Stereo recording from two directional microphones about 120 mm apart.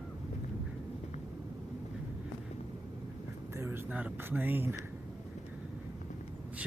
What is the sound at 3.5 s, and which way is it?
Speech, 20° right (ahead or behind).